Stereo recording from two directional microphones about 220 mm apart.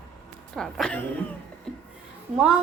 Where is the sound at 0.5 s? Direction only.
Centre (ahead or behind).